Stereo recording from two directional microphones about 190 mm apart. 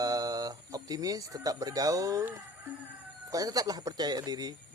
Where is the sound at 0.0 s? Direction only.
20° right (ahead or behind).